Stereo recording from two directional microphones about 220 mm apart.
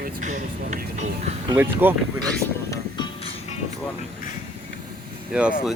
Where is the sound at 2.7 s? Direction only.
20° left (ahead or behind).